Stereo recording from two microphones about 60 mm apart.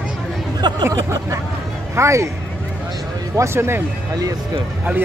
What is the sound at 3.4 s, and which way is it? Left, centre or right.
Speech, right.